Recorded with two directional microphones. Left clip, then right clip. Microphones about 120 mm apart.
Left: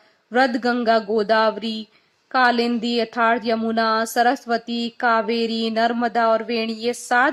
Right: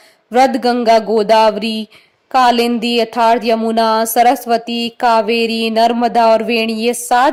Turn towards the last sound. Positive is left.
turn(degrees=-50)  # may be behind; listen again after turning